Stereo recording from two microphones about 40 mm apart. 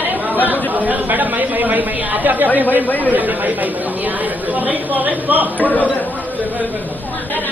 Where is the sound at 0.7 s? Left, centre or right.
Right.